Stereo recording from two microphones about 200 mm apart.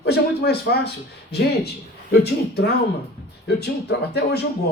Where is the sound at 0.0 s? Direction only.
55° left (ahead or behind).